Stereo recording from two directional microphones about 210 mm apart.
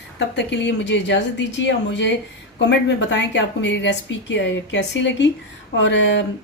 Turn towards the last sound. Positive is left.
turn(degrees=55)  # may be behind; listen again after turning